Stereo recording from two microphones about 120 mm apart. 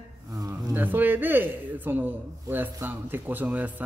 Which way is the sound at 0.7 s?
15° right (ahead or behind).